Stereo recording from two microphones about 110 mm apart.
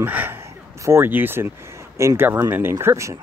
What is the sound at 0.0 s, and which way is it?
Speech, 15° right (ahead or behind).